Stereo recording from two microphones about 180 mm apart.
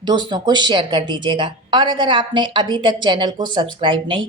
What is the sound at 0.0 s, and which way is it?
Speech, 25° right (ahead or behind).